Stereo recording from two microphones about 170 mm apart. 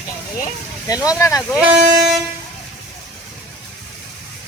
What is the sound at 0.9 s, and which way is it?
Speech, 20° left (ahead or behind).